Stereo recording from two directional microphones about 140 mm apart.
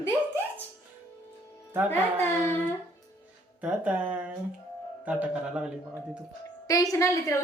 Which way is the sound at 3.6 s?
10° right (ahead or behind).